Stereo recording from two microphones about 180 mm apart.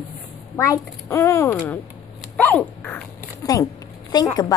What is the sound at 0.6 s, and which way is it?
A child's voice, 15° left (ahead or behind).